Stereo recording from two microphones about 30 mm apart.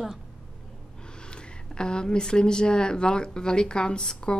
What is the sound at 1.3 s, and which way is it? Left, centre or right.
Speech, left.